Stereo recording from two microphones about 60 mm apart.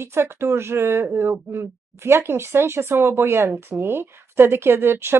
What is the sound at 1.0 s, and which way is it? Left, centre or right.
Speech, right.